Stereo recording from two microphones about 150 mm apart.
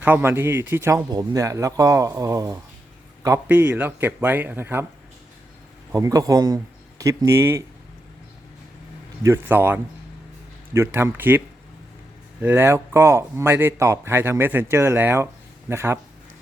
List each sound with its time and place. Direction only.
0.0 s a man's voice: 15° right (ahead or behind)
5.9 s a man's voice: 20° right (ahead or behind)
9.2 s a man's voice: 15° right (ahead or behind)